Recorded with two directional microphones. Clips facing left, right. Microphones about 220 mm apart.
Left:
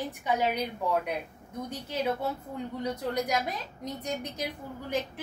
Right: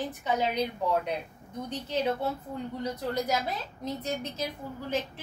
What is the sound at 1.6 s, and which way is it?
Speech, 10° left (ahead or behind).